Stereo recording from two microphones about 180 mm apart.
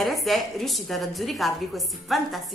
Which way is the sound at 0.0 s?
Centre (ahead or behind).